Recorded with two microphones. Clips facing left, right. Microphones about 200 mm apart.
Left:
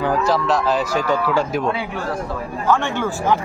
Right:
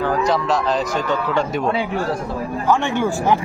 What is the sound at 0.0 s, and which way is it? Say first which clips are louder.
Speech: even; 5° left (ahead or behind).